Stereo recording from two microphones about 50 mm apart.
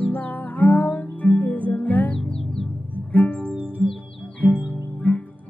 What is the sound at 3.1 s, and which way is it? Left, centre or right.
Music, left.